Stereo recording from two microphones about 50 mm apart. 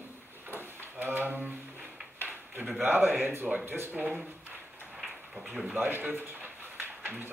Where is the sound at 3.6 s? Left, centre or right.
Right.